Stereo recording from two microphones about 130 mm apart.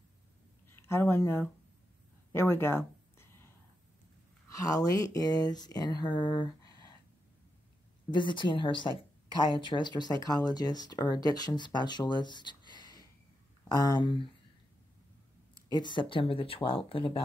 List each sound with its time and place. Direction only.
0.7 s speech: 20° left (ahead or behind)
2.3 s a sound: 15° left (ahead or behind)
4.5 s speech: 25° left (ahead or behind)
8.1 s speech: 40° left (ahead or behind)
15.7 s speech: 35° left (ahead or behind)